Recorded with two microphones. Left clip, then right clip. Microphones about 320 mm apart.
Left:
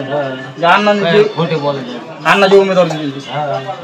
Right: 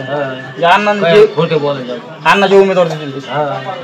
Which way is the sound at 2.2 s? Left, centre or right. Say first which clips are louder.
Even; centre.